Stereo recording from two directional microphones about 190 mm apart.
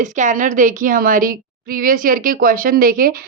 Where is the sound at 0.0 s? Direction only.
40° right (ahead or behind).